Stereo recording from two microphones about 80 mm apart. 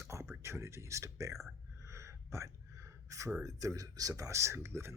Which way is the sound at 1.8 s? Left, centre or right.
Right.